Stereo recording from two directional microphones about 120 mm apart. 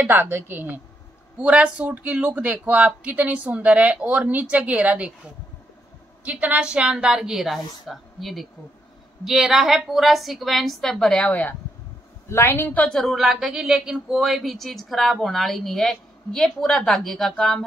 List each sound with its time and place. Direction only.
0.0 s speech: 15° right (ahead or behind)
6.2 s a woman's voice: 10° right (ahead or behind); by 17.6 s 5° left (ahead or behind)